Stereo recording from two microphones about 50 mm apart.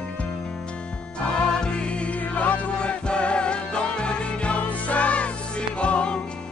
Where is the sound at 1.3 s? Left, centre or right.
Centre.